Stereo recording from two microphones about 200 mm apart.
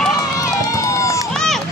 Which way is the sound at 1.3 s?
Centre (ahead or behind).